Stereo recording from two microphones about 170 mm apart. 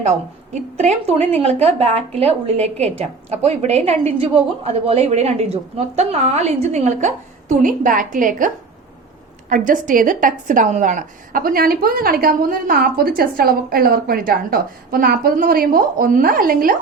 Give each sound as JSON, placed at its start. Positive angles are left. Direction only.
{"t": 0.8, "sound": "a woman's voice", "side_deg": -40}
{"t": 9.5, "sound": "a woman's voice", "side_deg": -50}